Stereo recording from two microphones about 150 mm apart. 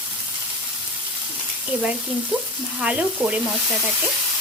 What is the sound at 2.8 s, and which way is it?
Frying, 10° right (ahead or behind).